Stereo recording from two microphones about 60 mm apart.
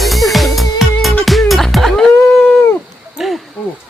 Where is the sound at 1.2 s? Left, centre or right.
Centre.